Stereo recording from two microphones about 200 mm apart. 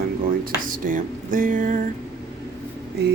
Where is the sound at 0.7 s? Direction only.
40° right (ahead or behind).